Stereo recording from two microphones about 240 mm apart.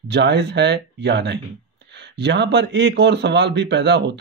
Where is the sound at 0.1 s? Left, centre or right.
Right.